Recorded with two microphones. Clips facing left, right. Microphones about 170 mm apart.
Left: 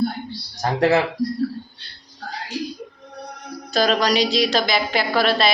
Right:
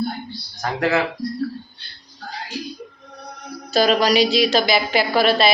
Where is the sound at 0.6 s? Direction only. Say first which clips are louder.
Left 3 dB; 30° left (ahead or behind).